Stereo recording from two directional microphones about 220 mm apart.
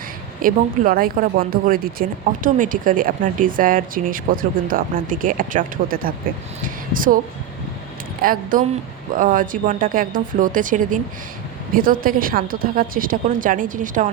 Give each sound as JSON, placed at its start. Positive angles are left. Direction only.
{"t": 0.4, "sound": "a woman's voice", "side_deg": -40}
{"t": 8.2, "sound": "a woman's voice", "side_deg": -40}